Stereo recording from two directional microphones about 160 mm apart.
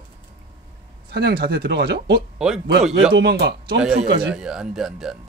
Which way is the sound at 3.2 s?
90° right.